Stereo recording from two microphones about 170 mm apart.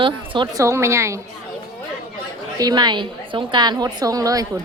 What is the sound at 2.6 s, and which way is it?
A woman's voice, 25° right (ahead or behind).